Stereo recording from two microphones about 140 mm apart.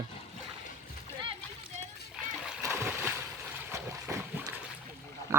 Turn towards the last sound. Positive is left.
turn(degrees=-20)  # may be behind; listen again after turning